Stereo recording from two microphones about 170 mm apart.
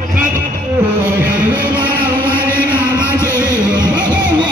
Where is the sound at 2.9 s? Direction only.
15° left (ahead or behind).